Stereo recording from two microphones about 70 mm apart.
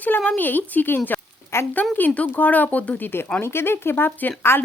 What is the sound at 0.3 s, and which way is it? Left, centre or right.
Speech, left.